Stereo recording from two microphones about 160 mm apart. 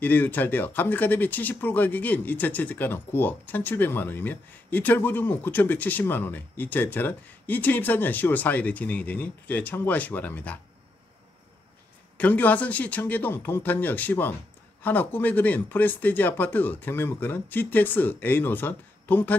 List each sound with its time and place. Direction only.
0.0 s speech: 10° left (ahead or behind)
12.2 s speech: 10° left (ahead or behind)